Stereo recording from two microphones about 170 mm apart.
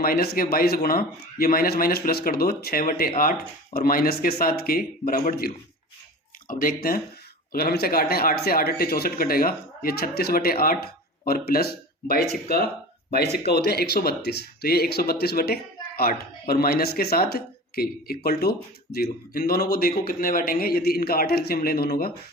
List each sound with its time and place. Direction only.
0.0 s speech: 60° left (ahead or behind)
6.5 s speech: 55° left (ahead or behind)